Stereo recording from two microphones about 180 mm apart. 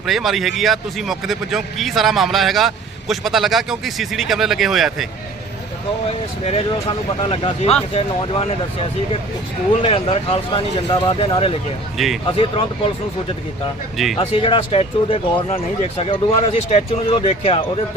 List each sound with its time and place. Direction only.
0.0 s speech: centre (ahead or behind)
6.4 s speech: 35° left (ahead or behind)
9.8 s speech: 30° left (ahead or behind)
11.9 s speech: centre (ahead or behind)
12.4 s speech: 30° left (ahead or behind)
13.9 s speech: centre (ahead or behind)
14.2 s speech: 30° left (ahead or behind)